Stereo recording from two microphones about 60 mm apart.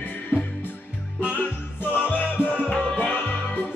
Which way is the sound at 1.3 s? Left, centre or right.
Left.